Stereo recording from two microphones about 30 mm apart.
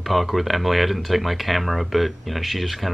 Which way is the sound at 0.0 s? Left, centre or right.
Centre.